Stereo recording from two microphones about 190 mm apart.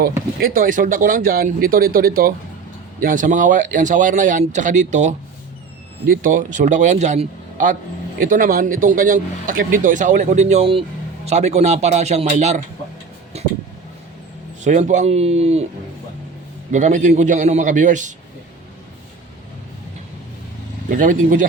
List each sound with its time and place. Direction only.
0.3 s speech: 50° right (ahead or behind)
6.2 s speech: 40° right (ahead or behind)
14.6 s speech: 40° right (ahead or behind)
16.7 s speech: 40° right (ahead or behind)
20.9 s speech: 45° right (ahead or behind)